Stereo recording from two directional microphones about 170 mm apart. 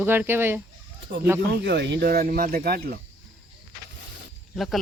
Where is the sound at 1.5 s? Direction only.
85° right; by 3.0 s 65° right (ahead or behind).